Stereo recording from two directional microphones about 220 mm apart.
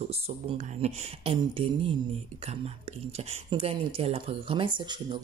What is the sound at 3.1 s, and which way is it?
Speech, 25° right (ahead or behind).